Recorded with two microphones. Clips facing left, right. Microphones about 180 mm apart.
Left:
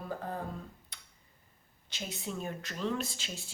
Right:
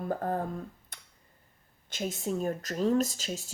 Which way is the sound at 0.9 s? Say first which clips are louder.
Right 3 dB; 50° right (ahead or behind).